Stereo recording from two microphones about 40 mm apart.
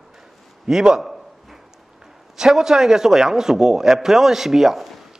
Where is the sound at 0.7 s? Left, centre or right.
Centre.